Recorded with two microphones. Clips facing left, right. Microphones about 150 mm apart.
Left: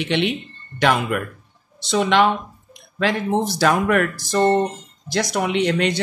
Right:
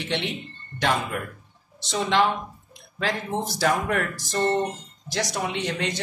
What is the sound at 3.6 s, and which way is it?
Speech, 85° left.